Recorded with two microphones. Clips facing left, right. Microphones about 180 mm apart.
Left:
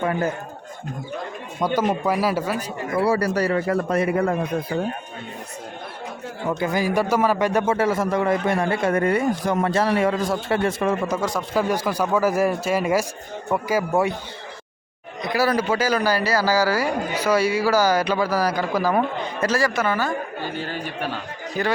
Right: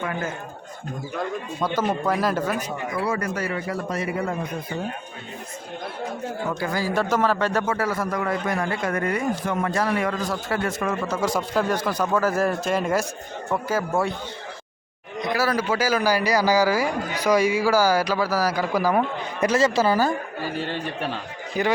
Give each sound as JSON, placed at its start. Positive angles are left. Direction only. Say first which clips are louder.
{"t": 1.6, "sound": "speech", "louder": "left 3 dB", "side_deg": 10}
{"t": 3.0, "sound": "speech", "louder": "left 7 dB", "side_deg": 35}
{"t": 3.7, "sound": "speech", "louder": "left 6 dB", "side_deg": 55}
{"t": 6.6, "sound": "speech", "louder": "left 4 dB", "side_deg": 15}
{"t": 7.6, "sound": "a man's voice", "louder": "left 4 dB", "side_deg": 25}
{"t": 11.3, "sound": "speech", "louder": "left 1 dB", "side_deg": 10}
{"t": 15.4, "sound": "a man's voice", "louder": "left 3 dB", "side_deg": -5}
{"t": 21.6, "sound": "a man's voice", "louder": "right 1 dB", "side_deg": -15}